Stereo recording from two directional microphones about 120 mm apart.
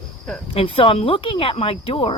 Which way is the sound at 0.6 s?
50° left (ahead or behind).